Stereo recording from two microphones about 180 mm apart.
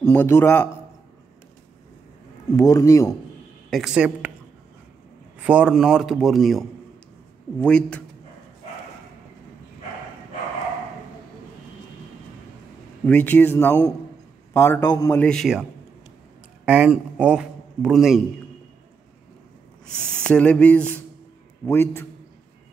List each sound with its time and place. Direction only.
0.0 s a man's voice: 15° left (ahead or behind)
2.5 s a man's voice: 20° left (ahead or behind)
3.7 s speech: 5° right (ahead or behind)
5.4 s speech: 5° right (ahead or behind)
7.6 s speech: 5° left (ahead or behind)
13.0 s a man's voice: 10° left (ahead or behind)
16.6 s a man's voice: 5° right (ahead or behind)
20.1 s a man's voice: 5° left (ahead or behind)